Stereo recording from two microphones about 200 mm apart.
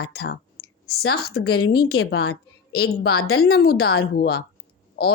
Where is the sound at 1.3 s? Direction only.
90° left.